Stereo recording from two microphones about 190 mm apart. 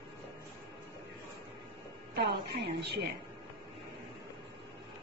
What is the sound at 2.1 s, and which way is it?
Speech, 60° right (ahead or behind).